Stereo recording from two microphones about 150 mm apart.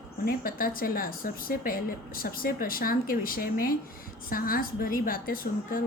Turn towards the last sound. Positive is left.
turn(degrees=75)  # may be behind; listen again after turning